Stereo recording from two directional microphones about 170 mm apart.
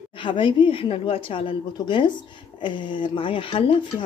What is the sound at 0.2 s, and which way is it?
Speech, 30° left (ahead or behind).